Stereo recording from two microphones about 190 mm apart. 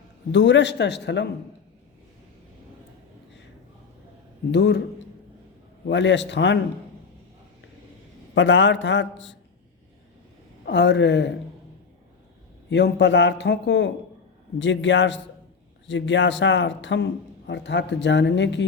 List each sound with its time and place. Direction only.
0.3 s a man's voice: 70° left (ahead or behind)
4.5 s a man's voice: 65° left (ahead or behind)
5.9 s speech: 70° left (ahead or behind)
8.4 s speech: 75° left (ahead or behind)
10.7 s speech: 65° left (ahead or behind)
12.7 s speech: 65° left (ahead or behind)